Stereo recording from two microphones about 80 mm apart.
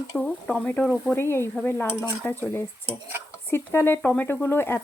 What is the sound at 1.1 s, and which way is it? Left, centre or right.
Speech, left.